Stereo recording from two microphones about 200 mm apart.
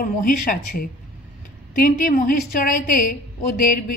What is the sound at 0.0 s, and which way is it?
A woman's voice, 45° left (ahead or behind).